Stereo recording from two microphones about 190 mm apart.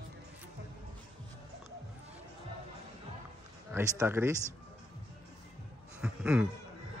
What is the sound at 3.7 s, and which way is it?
Speech, 10° right (ahead or behind).